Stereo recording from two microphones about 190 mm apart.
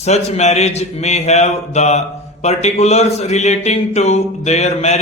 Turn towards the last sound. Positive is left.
turn(degrees=35)  # may be behind; listen again after turning